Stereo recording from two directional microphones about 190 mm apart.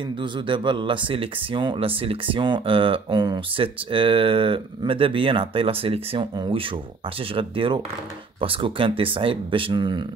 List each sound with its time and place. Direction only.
0.2 s speech: 25° right (ahead or behind)